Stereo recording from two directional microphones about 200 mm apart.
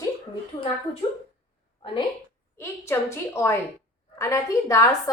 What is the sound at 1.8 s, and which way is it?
Speech, 25° left (ahead or behind).